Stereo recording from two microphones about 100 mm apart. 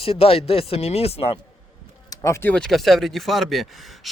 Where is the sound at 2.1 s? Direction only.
35° left (ahead or behind).